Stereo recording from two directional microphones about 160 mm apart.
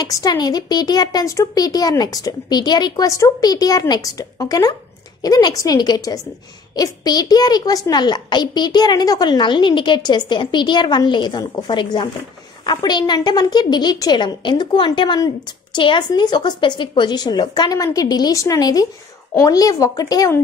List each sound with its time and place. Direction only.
0.0 s a woman's voice: 25° left (ahead or behind)